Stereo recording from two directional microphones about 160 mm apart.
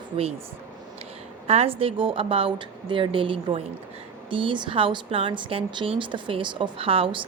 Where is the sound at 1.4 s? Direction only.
40° right (ahead or behind).